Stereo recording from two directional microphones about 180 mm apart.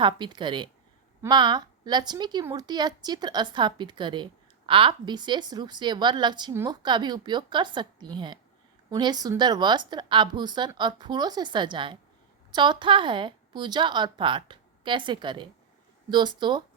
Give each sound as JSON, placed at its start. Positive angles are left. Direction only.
{"t": 0.0, "sound": "a woman's voice", "side_deg": -25}